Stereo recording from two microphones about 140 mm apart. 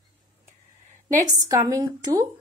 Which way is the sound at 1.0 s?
25° right (ahead or behind).